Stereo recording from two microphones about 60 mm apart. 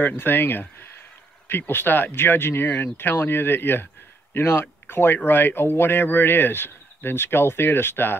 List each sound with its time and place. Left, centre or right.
0.0 s speech: left